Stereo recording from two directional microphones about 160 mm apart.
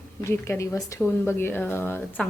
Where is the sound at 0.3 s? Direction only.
15° left (ahead or behind).